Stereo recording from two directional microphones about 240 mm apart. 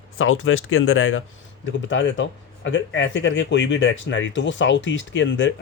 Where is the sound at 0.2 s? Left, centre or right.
Left.